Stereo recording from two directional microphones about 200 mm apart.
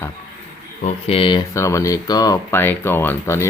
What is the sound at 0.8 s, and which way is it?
Speech, 30° left (ahead or behind).